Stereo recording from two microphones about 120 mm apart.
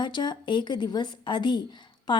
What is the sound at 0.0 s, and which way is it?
A woman's voice, 40° left (ahead or behind).